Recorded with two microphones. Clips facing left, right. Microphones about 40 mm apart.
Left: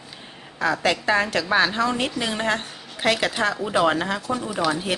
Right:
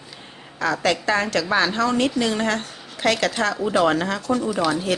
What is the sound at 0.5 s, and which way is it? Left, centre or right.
A woman's voice, centre.